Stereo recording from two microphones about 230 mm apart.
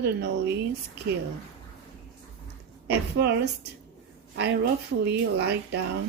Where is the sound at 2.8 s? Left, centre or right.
Right.